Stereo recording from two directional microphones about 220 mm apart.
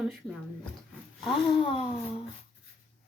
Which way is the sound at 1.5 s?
25° left (ahead or behind).